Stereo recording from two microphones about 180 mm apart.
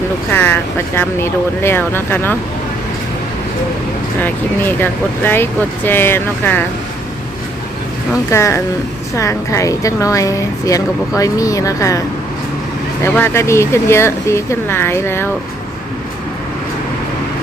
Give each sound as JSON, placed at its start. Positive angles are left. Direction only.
{"t": 0.3, "sound": "a woman's voice", "side_deg": 10}
{"t": 4.2, "sound": "a woman's voice", "side_deg": 10}
{"t": 8.3, "sound": "a woman's voice", "side_deg": 15}